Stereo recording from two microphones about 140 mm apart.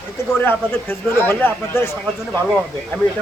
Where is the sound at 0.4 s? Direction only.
15° left (ahead or behind).